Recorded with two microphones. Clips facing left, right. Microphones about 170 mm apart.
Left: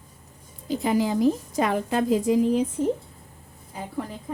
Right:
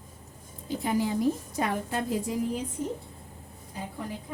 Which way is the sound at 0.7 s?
90° left.